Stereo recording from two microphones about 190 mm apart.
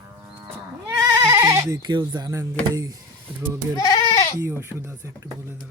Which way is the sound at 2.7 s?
20° right (ahead or behind).